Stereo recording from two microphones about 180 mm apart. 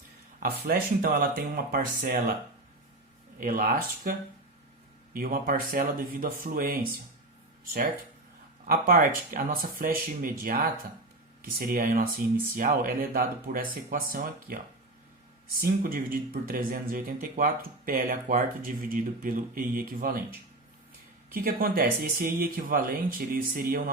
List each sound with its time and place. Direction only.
0.3 s speech: 60° right (ahead or behind)
3.4 s speech: 50° right (ahead or behind)
5.1 s speech: 55° right (ahead or behind)
8.6 s speech: 50° right (ahead or behind)
21.3 s speech: 55° right (ahead or behind)